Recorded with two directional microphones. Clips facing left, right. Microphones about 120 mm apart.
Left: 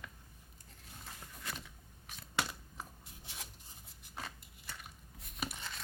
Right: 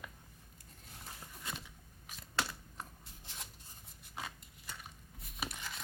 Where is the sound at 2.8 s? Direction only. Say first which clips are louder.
Even; 5° left (ahead or behind).